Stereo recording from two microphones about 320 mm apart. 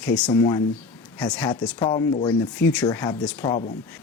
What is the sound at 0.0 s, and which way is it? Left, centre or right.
Speech, centre.